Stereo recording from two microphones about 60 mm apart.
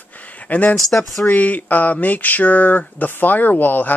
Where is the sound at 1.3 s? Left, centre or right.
Left.